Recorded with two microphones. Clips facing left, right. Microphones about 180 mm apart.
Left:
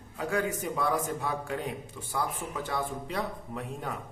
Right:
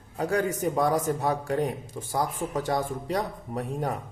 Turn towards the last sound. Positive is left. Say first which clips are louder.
# right 6 dB
turn(degrees=-40)  # may be behind; listen again after turning